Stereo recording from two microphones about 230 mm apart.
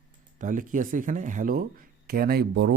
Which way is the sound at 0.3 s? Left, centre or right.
Right.